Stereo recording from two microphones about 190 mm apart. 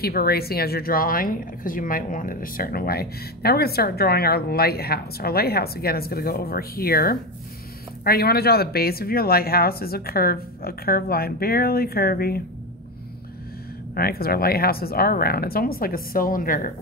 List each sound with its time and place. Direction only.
0.0 s a woman's voice: 55° left (ahead or behind)
13.9 s a woman's voice: 50° left (ahead or behind)